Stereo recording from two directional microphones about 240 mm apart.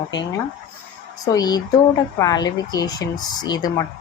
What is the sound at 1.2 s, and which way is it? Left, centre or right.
Speech, centre.